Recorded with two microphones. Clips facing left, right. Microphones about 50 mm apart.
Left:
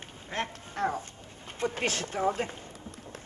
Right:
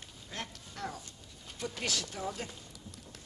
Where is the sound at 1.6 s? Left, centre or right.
Left.